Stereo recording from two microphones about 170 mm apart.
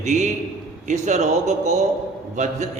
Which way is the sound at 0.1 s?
45° right (ahead or behind).